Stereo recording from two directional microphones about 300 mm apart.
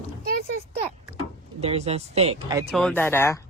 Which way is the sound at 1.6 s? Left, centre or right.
Right.